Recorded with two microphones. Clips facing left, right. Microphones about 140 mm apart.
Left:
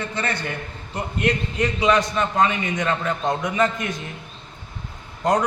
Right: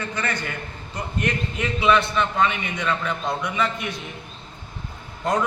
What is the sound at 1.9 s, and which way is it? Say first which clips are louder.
A man's voice: left 1 dB; 40° left (ahead or behind).